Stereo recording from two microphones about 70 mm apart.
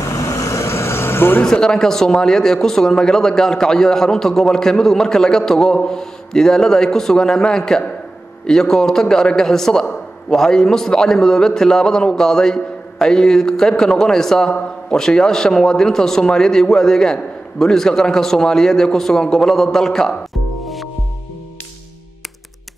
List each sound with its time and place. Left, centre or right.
0.2 s vehicle: left
1.4 s speech: centre
20.6 s music: centre